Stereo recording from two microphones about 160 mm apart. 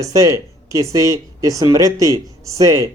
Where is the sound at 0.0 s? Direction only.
20° right (ahead or behind).